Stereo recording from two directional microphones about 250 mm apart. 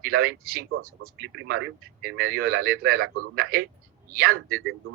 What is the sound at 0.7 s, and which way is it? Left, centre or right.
Speech, right.